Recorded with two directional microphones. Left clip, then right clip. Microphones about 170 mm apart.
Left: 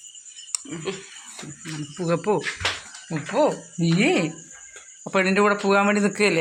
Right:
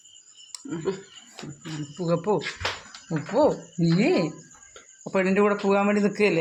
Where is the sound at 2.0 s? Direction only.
Centre (ahead or behind).